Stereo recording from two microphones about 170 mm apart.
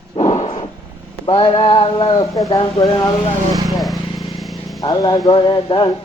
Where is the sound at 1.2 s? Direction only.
25° left (ahead or behind).